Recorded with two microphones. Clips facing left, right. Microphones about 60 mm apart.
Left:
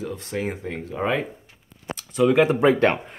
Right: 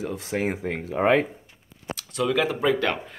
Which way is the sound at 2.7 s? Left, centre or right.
Left.